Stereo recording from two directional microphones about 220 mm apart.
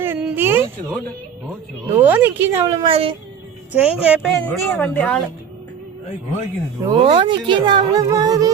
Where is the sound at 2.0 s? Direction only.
10° right (ahead or behind).